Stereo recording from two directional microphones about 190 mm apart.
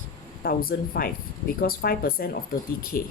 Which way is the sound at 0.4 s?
50° left (ahead or behind).